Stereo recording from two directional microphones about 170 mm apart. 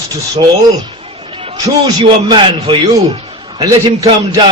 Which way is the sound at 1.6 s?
25° right (ahead or behind).